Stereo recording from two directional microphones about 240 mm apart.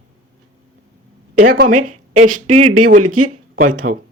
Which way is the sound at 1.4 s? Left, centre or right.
Right.